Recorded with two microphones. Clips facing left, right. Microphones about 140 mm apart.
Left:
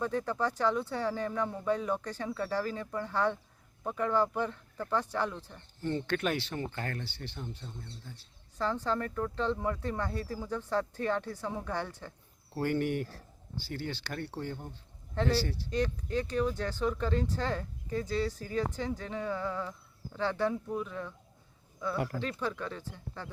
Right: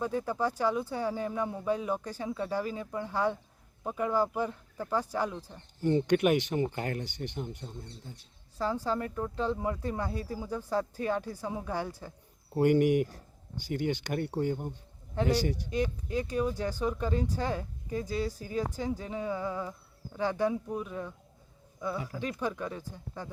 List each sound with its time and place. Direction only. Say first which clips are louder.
0.0 s speech: right 1 dB; 10° right (ahead or behind)
21.9 s speech: left 3 dB; 60° left (ahead or behind)
22.2 s speech: right 2 dB; 15° right (ahead or behind)